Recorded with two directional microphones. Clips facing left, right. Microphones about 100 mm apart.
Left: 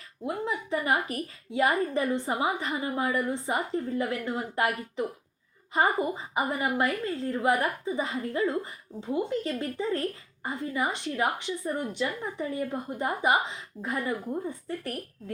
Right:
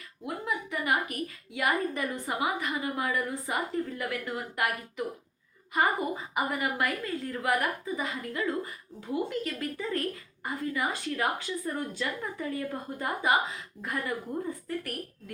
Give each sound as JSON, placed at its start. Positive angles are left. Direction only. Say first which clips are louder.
{"t": 0.3, "sound": "a woman's voice", "louder": "left 3 dB", "side_deg": 30}